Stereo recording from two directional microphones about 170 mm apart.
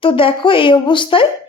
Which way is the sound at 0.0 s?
30° left (ahead or behind).